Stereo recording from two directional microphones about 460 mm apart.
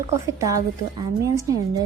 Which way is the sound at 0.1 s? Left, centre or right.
Centre.